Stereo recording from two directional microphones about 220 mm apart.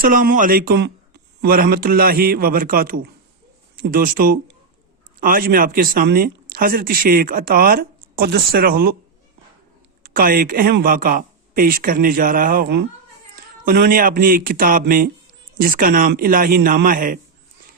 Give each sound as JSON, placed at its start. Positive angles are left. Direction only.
{"t": 0.0, "sound": "speech", "side_deg": -40}
{"t": 10.0, "sound": "speech", "side_deg": -40}